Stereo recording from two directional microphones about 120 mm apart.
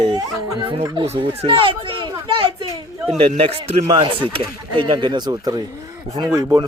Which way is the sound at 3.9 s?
40° right (ahead or behind).